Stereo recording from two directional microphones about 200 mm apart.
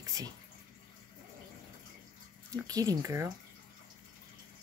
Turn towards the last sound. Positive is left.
turn(degrees=-15)  # may be behind; listen again after turning